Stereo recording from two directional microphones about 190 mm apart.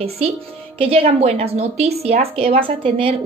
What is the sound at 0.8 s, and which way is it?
A woman's voice, 30° right (ahead or behind).